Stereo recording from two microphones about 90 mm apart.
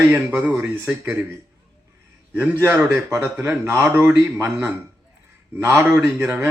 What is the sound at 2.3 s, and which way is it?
Speech, 25° right (ahead or behind).